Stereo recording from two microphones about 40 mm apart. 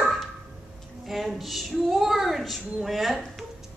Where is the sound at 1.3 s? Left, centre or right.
Centre.